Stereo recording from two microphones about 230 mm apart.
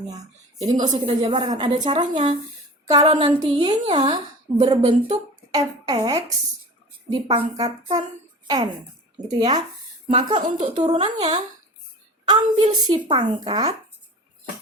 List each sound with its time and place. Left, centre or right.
0.1 s a woman's voice: centre
0.9 s a woman's voice: right
9.4 s a woman's voice: centre